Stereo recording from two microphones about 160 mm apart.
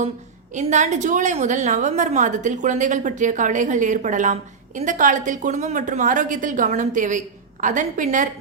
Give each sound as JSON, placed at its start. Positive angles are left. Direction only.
{"t": 0.5, "sound": "a woman's voice", "side_deg": -50}